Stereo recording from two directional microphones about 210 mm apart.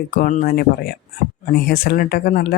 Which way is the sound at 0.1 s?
40° left (ahead or behind).